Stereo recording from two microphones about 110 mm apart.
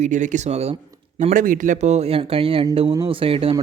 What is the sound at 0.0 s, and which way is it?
Speech, 90° right.